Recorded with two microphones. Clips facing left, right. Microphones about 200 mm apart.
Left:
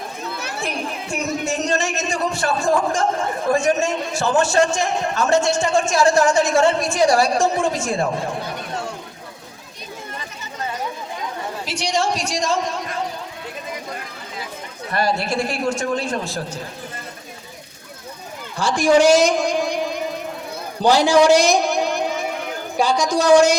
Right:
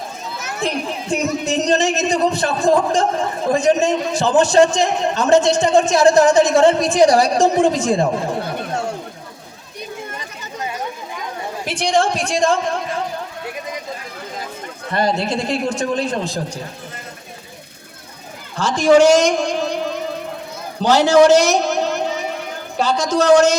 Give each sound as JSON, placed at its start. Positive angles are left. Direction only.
{"t": 1.1, "sound": "a man's voice", "side_deg": -20}
{"t": 11.6, "sound": "a man's voice", "side_deg": -55}
{"t": 14.9, "sound": "a man's voice", "side_deg": -20}
{"t": 18.5, "sound": "a man's voice", "side_deg": 10}